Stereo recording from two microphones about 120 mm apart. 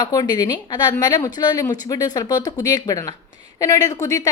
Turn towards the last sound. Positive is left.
turn(degrees=30)  # may be behind; listen again after turning